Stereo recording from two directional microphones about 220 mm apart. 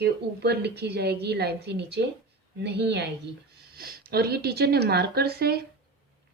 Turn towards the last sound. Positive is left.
turn(degrees=-45)  # may be behind; listen again after turning